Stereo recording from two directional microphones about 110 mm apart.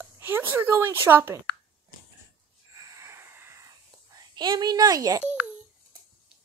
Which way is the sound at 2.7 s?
30° right (ahead or behind).